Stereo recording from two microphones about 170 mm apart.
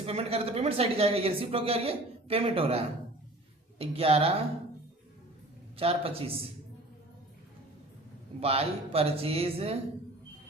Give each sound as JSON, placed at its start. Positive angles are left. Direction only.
{"t": 0.0, "sound": "speech", "side_deg": -35}
{"t": 5.7, "sound": "speech", "side_deg": -35}
{"t": 8.4, "sound": "speech", "side_deg": -35}